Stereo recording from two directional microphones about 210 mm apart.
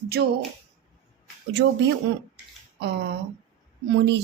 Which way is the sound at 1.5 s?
55° right (ahead or behind).